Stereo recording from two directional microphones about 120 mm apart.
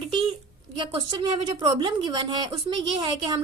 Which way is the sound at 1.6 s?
40° right (ahead or behind).